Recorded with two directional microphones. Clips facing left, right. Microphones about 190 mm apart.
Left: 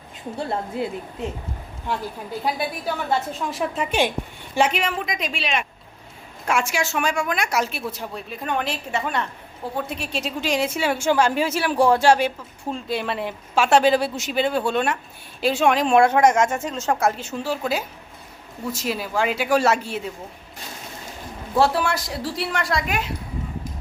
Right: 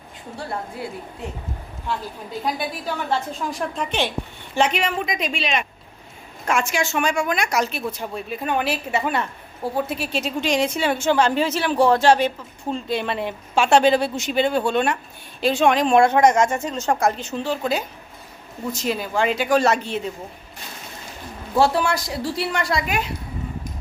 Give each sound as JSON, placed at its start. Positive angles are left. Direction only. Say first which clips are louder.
{"t": 0.3, "sound": "a woman's voice", "louder": "left 4 dB", "side_deg": 20}
{"t": 3.1, "sound": "a woman's voice", "louder": "even", "side_deg": 0}
{"t": 21.5, "sound": "a woman's voice", "louder": "right 1 dB", "side_deg": 0}